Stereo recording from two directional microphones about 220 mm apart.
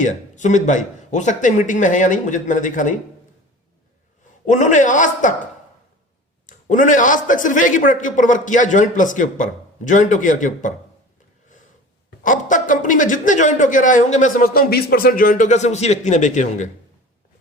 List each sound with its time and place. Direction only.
0.0 s a man's voice: 35° left (ahead or behind)
4.4 s a man's voice: 35° left (ahead or behind)
6.4 s a man's voice: 35° left (ahead or behind)
12.2 s a man's voice: 35° left (ahead or behind)